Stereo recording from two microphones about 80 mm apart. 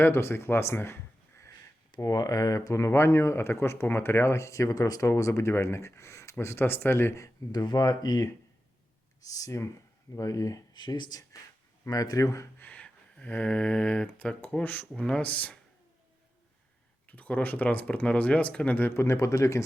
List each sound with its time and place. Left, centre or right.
0.0 s speech: left
2.0 s speech: left
7.5 s speech: left
10.8 s speech: left
11.9 s speech: left
12.5 s speech: centre
17.1 s speech: centre; by 19.6 s left